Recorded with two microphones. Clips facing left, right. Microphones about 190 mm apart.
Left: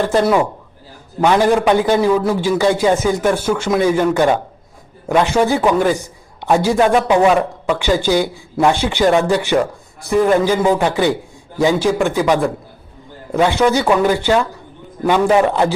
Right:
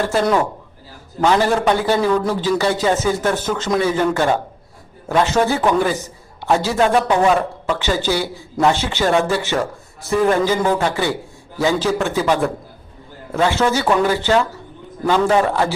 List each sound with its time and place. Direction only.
1.2 s a man's voice: 15° left (ahead or behind)